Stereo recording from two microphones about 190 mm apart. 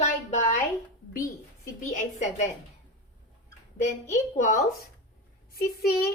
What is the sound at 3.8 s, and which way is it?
Speech, 40° left (ahead or behind).